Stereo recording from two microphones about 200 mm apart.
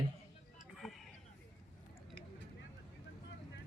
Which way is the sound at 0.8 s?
Centre (ahead or behind).